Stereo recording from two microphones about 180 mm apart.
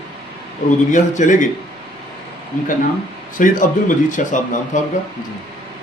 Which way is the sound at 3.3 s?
45° left (ahead or behind).